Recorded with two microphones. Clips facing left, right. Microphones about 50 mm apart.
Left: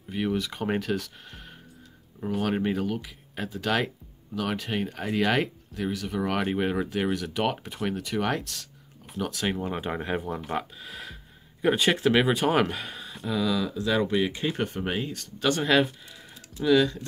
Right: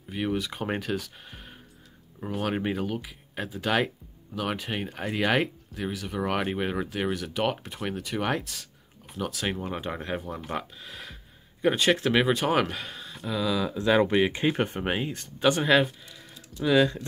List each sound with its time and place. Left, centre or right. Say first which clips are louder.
0.1 s speech: left 1 dB; centre
13.7 s speech: right 6 dB; right
15.6 s speech: right 1 dB; centre
16.6 s speech: left 1 dB; right